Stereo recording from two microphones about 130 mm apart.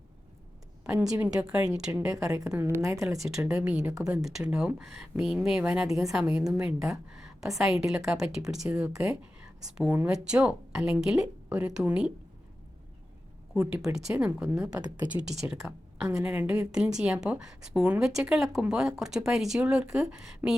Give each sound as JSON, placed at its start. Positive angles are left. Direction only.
{"t": 0.9, "sound": "a woman's voice", "side_deg": -10}
{"t": 1.9, "sound": "a woman's voice", "side_deg": -20}
{"t": 3.2, "sound": "a woman's voice", "side_deg": -5}
{"t": 13.7, "sound": "a woman's voice", "side_deg": -5}
{"t": 16.0, "sound": "a woman's voice", "side_deg": -15}